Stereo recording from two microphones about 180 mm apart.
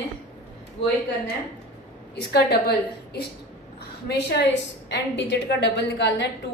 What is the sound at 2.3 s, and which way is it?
A woman's voice, 65° left (ahead or behind).